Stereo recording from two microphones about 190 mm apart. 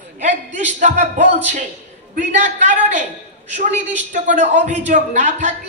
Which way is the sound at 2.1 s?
40° right (ahead or behind).